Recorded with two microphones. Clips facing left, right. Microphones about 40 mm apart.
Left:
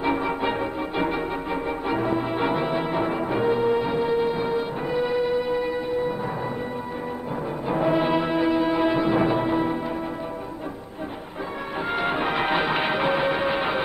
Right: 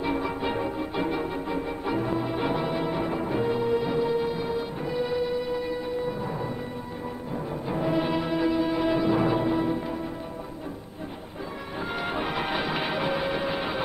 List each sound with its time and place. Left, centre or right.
0.0 s music: left
7.6 s music: left
11.9 s music: left